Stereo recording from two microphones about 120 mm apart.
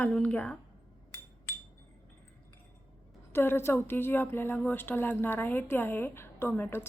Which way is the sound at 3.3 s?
20° left (ahead or behind).